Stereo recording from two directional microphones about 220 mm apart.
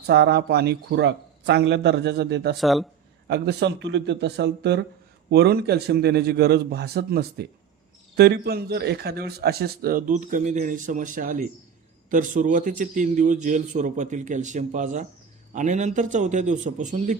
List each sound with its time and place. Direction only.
0.1 s speech: 50° right (ahead or behind)
2.6 s speech: centre (ahead or behind)
3.2 s a man's voice: 50° right (ahead or behind); by 17.2 s 35° right (ahead or behind)